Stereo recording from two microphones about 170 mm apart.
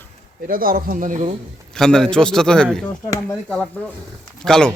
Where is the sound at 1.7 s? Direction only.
5° left (ahead or behind).